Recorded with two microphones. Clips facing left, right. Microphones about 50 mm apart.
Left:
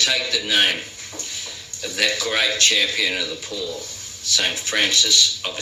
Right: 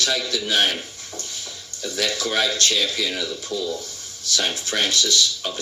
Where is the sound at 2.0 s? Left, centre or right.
Left.